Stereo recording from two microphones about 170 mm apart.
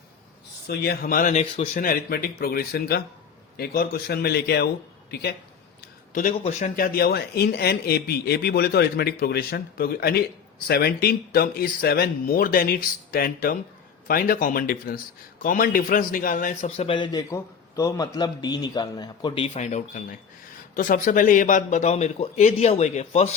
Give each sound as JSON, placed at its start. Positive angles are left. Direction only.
{"t": 0.7, "sound": "speech", "side_deg": 65}
{"t": 1.4, "sound": "speech", "side_deg": 40}
{"t": 1.8, "sound": "a man's voice", "side_deg": 60}
{"t": 5.8, "sound": "a sound", "side_deg": 50}
{"t": 6.4, "sound": "a man's voice", "side_deg": 45}